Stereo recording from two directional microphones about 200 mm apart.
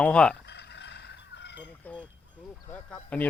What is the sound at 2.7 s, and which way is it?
Speech, 5° left (ahead or behind).